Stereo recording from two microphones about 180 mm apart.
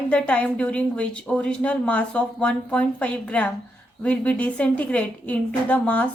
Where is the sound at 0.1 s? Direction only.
5° left (ahead or behind).